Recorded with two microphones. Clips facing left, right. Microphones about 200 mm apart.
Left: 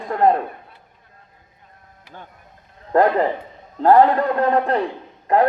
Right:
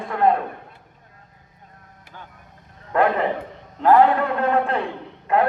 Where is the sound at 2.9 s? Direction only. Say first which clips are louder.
Left 3 dB; 35° left (ahead or behind).